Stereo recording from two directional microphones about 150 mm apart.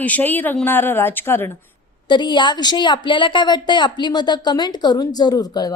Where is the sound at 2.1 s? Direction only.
30° left (ahead or behind).